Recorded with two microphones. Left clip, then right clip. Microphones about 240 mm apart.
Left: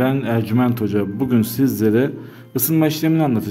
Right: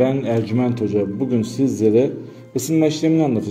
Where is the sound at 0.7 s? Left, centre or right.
Left.